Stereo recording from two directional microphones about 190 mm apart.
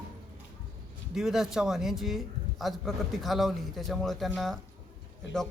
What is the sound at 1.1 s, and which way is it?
A man's voice, centre (ahead or behind).